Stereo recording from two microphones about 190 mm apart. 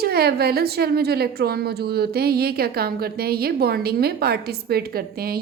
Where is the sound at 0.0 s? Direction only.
55° right (ahead or behind).